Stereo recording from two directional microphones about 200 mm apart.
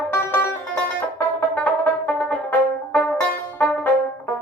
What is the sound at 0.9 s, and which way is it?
Music, 10° left (ahead or behind).